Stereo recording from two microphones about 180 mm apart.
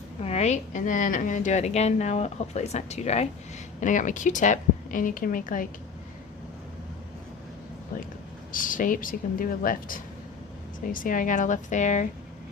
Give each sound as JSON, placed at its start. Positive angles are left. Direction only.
{"t": 0.2, "sound": "a woman's voice", "side_deg": 35}
{"t": 8.5, "sound": "speech", "side_deg": 50}